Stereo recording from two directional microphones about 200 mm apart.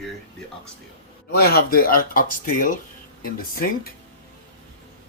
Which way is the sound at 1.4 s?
50° left (ahead or behind).